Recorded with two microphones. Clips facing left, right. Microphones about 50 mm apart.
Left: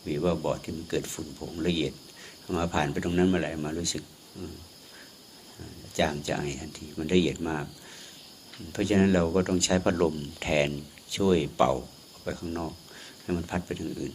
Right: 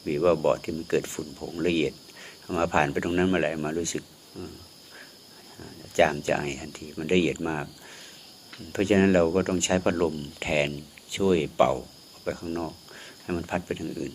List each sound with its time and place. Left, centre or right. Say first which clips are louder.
0.0 s speech: right 5 dB; right
1.6 s speech: right 4 dB; right
5.9 s speech: right 6 dB; right
7.3 s speech: right 1 dB; right
8.7 s speech: right 3 dB; right
9.9 s speech: even; centre; by 14.1 s right